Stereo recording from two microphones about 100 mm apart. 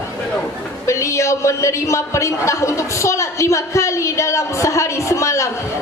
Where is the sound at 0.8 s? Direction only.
30° left (ahead or behind).